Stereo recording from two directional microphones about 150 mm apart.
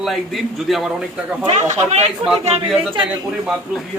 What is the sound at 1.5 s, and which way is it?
Speech, 50° right (ahead or behind).